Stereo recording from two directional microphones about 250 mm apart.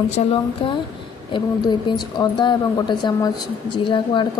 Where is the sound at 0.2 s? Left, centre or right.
Left.